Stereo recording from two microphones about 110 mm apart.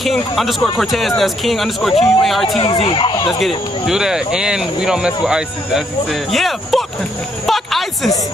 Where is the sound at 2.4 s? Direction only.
50° left (ahead or behind).